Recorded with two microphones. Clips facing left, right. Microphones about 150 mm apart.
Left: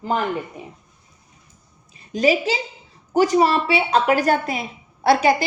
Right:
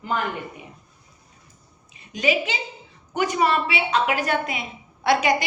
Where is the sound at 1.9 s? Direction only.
35° left (ahead or behind).